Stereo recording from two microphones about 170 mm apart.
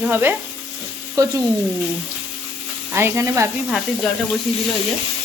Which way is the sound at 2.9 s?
15° right (ahead or behind).